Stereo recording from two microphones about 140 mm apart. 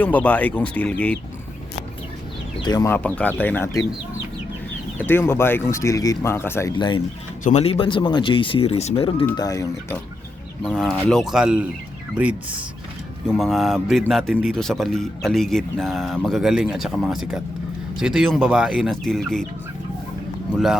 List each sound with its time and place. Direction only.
0.0 s speech: 10° left (ahead or behind)
2.6 s speech: 25° left (ahead or behind)
2.9 s speech: 10° left (ahead or behind)
4.9 s speech: 15° left (ahead or behind)
6.7 s speech: 35° left (ahead or behind)
9.3 s speech: 25° left (ahead or behind)
10.6 s speech: 5° left (ahead or behind)